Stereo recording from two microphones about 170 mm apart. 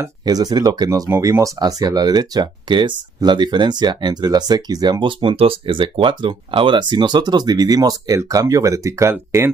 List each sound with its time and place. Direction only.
0.0 s speech: 20° right (ahead or behind)